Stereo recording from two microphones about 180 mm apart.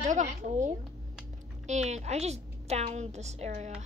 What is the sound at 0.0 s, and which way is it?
A child's voice, 45° right (ahead or behind).